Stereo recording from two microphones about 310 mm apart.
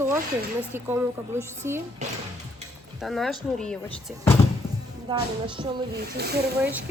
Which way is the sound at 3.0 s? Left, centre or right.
Centre.